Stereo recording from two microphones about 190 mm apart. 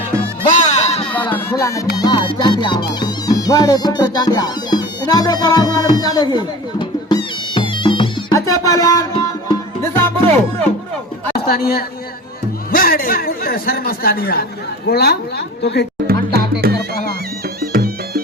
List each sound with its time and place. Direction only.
0.4 s music: 40° left (ahead or behind); by 1.3 s 25° left (ahead or behind)
1.3 s music: 10° left (ahead or behind)
11.3 s a man's voice: 55° left (ahead or behind)
16.0 s music: 55° right (ahead or behind)